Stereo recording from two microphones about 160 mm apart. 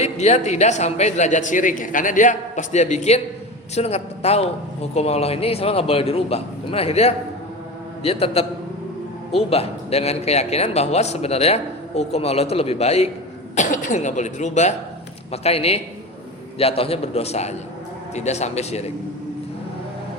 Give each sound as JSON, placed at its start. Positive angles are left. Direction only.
{"t": 0.0, "sound": "a man's voice", "side_deg": 45}